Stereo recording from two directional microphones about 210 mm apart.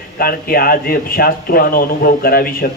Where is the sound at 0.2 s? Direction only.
45° left (ahead or behind).